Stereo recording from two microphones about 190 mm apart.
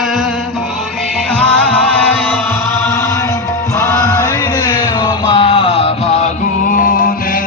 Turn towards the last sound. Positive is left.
turn(degrees=30)  # may be behind; listen again after turning